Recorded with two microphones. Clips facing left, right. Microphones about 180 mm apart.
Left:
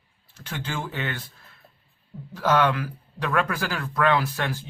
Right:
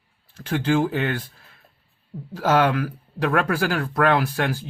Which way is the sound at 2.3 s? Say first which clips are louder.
Right 2 dB; 45° right (ahead or behind).